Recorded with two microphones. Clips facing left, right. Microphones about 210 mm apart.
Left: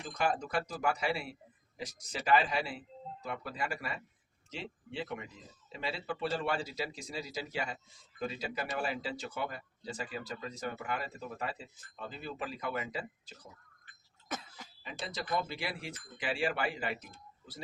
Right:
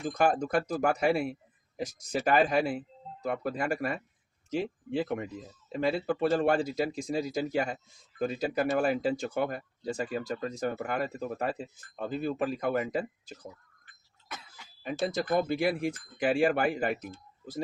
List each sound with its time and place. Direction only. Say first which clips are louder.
0.0 s speech: right 7 dB; 45° right (ahead or behind)
14.3 s cough: left 4 dB; 45° left (ahead or behind)
14.8 s speech: right 9 dB; 50° right (ahead or behind)